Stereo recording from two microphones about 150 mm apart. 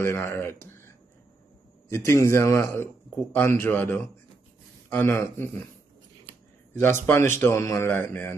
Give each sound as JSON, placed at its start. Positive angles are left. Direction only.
{"t": 0.0, "sound": "a man's voice", "side_deg": 15}
{"t": 6.8, "sound": "a man's voice", "side_deg": 15}